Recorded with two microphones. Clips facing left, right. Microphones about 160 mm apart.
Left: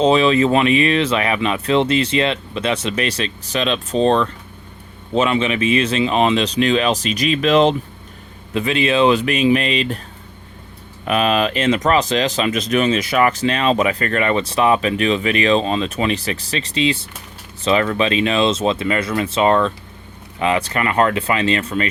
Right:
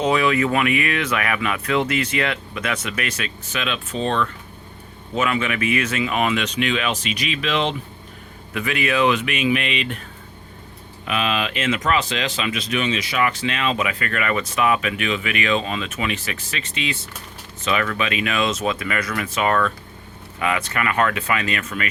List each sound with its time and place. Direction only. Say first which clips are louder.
0.0 s speech: left 5 dB; 25° left (ahead or behind)
8.5 s speech: left 5 dB; 25° left (ahead or behind)
11.0 s speech: left 6 dB; 45° left (ahead or behind)